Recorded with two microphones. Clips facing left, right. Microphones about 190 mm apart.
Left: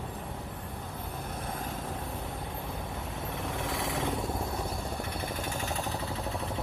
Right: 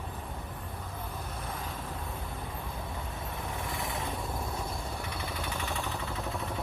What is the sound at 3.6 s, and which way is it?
Vehicle, 90° left.